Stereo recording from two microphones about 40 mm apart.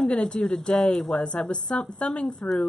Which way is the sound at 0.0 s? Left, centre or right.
Left.